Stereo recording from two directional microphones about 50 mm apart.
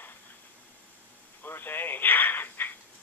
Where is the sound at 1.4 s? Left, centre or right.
Left.